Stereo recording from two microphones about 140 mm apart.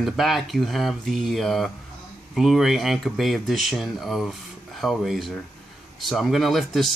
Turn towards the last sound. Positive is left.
turn(degrees=0)  # may be behind; listen again after turning